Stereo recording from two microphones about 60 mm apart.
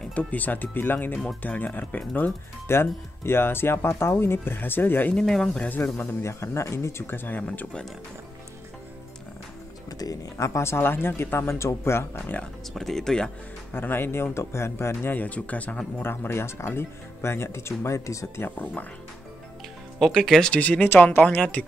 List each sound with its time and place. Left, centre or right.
0.1 s speech: left
2.7 s speech: left
5.1 s speech: centre
5.6 s speech: left
6.2 s speech: left
9.8 s speech: left
12.3 s speech: left
12.7 s speech: centre
13.7 s speech: left
15.1 s speech: left
16.0 s speech: left
20.0 s speech: centre
20.5 s speech: left
20.9 s speech: left